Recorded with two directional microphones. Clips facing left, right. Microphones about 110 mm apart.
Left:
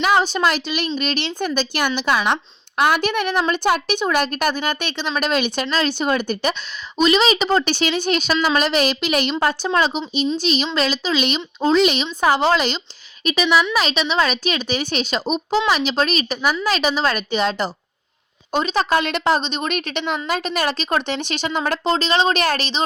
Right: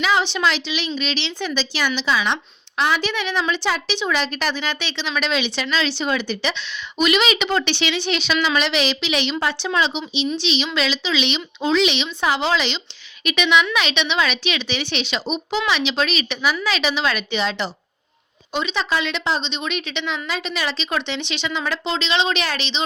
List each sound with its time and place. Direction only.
0.0 s a woman's voice: 45° left (ahead or behind)
7.0 s a woman's voice: 35° left (ahead or behind)